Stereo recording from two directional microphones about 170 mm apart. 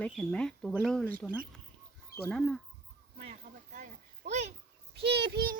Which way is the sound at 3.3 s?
50° right (ahead or behind).